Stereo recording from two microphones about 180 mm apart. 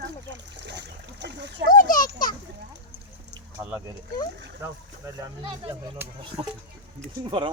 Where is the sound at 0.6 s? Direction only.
70° right (ahead or behind).